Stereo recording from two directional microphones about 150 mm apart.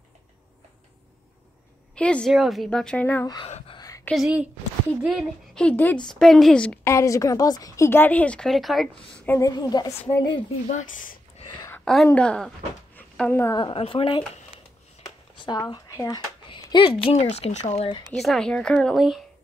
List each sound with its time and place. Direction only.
2.0 s a woman's voice: 5° left (ahead or behind)
3.4 s speech: 45° left (ahead or behind)
3.7 s a sound: 25° left (ahead or behind)
4.1 s speech: 5° right (ahead or behind)
6.9 s a woman's voice: 20° left (ahead or behind); by 8.8 s centre (ahead or behind)
9.2 s a woman's voice: 15° left (ahead or behind)
9.5 s a woman's voice: 25° left (ahead or behind)
10.7 s speech: 60° left (ahead or behind)
11.4 s a sound: 20° left (ahead or behind)
11.8 s a woman's voice: centre (ahead or behind)
13.6 s speech: 35° left (ahead or behind)
15.0 s a sound: 30° left (ahead or behind)
16.7 s speech: 35° left (ahead or behind)
18.1 s speech: centre (ahead or behind)